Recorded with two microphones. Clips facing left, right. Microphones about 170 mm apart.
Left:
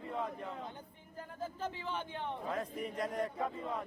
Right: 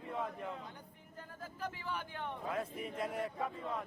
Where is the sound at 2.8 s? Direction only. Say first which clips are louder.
Left 2 dB; 5° right (ahead or behind).